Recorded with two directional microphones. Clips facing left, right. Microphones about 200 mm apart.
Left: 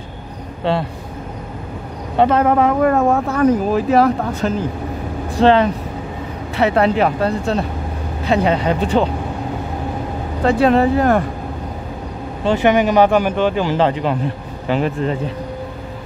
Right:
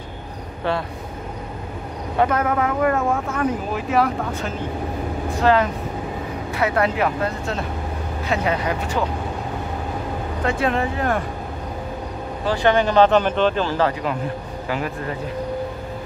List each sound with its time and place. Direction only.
2.1 s speech: 30° left (ahead or behind)
5.4 s speech: 25° left (ahead or behind)
10.4 s speech: 35° left (ahead or behind)
12.4 s speech: 15° left (ahead or behind)